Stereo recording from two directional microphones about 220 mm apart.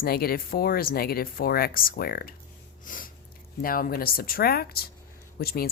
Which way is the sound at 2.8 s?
40° left (ahead or behind).